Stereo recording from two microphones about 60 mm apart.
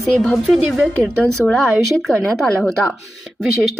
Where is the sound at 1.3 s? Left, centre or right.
Centre.